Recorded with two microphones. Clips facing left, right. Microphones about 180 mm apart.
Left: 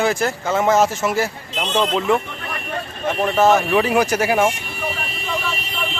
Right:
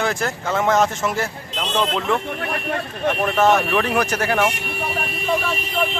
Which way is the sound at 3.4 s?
5° left (ahead or behind).